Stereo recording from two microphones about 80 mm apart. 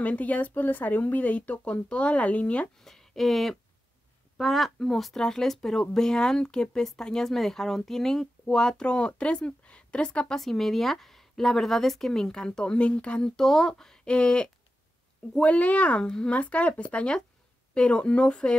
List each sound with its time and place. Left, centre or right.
0.0 s speech: centre
2.8 s speech: centre